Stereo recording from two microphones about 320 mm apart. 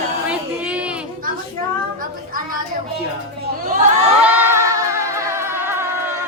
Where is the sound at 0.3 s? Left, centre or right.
Centre.